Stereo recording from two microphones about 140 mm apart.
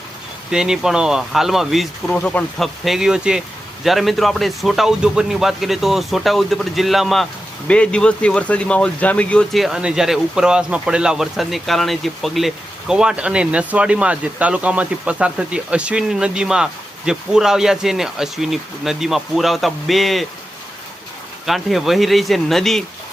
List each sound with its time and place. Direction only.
0.5 s speech: 5° right (ahead or behind)
21.4 s speech: centre (ahead or behind)